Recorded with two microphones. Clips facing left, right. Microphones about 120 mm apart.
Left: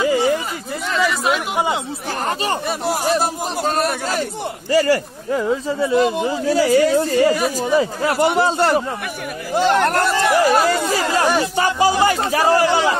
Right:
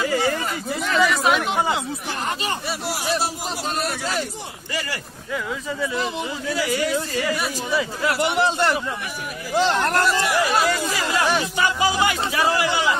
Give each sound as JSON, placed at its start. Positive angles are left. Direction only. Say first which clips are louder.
{"t": 0.0, "sound": "a sound", "louder": "left 5 dB", "side_deg": 20}
{"t": 0.9, "sound": "chatter", "louder": "even", "side_deg": 0}
{"t": 2.9, "sound": "a man's voice", "louder": "left 6 dB", "side_deg": 45}
{"t": 5.4, "sound": "speech", "louder": "left 8 dB", "side_deg": 30}
{"t": 6.0, "sound": "a man's voice", "louder": "left 8 dB", "side_deg": 50}
{"t": 6.4, "sound": "speech", "louder": "left 9 dB", "side_deg": 35}
{"t": 9.6, "sound": "speech", "louder": "left 4 dB", "side_deg": 50}
{"t": 10.8, "sound": "chatter", "louder": "left 4 dB", "side_deg": 45}
{"t": 12.0, "sound": "speech", "louder": "left 5 dB", "side_deg": 40}